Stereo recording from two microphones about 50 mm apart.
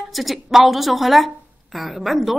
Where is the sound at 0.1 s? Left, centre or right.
Centre.